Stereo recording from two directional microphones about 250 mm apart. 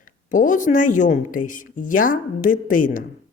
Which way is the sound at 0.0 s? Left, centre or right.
Left.